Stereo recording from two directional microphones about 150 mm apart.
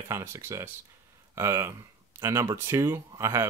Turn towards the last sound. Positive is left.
turn(degrees=-15)  # may be behind; listen again after turning